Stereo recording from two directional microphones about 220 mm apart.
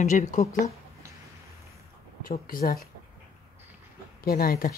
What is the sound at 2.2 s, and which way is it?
Speech, 40° left (ahead or behind).